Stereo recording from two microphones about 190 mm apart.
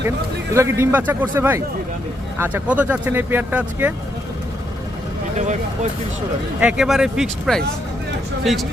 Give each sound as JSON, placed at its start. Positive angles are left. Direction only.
{"t": 0.5, "sound": "speech", "side_deg": -15}
{"t": 5.4, "sound": "speech", "side_deg": -40}
{"t": 6.6, "sound": "speech", "side_deg": -5}